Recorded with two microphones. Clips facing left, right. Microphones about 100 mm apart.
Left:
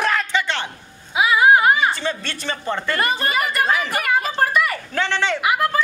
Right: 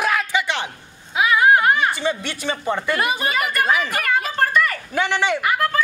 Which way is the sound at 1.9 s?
15° right (ahead or behind).